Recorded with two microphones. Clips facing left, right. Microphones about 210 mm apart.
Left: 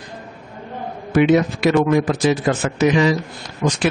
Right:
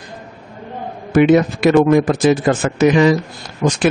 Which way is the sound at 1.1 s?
50° right (ahead or behind).